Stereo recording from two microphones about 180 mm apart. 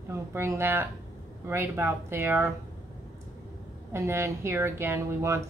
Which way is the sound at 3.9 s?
15° right (ahead or behind).